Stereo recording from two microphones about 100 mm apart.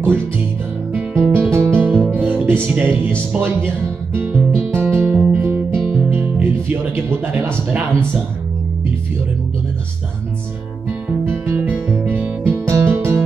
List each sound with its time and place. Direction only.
0.9 s music: 20° right (ahead or behind)
11.1 s music: 20° right (ahead or behind)